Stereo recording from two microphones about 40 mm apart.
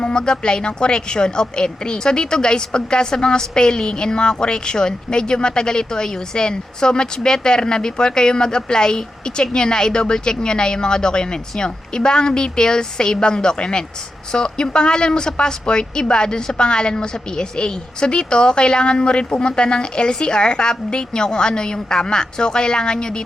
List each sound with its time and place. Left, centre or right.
0.0 s a woman's voice: left